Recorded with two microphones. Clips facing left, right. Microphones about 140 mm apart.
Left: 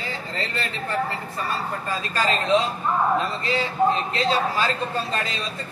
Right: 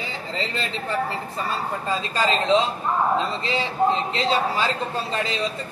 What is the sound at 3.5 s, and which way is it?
A man's voice, 20° right (ahead or behind).